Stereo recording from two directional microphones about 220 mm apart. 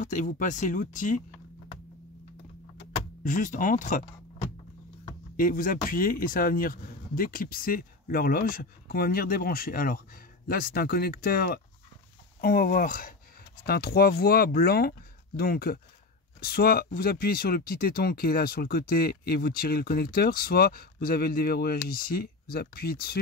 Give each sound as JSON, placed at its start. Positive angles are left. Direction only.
{"t": 0.0, "sound": "speech", "side_deg": 35}
{"t": 2.8, "sound": "power windows", "side_deg": 35}
{"t": 5.4, "sound": "speech", "side_deg": 40}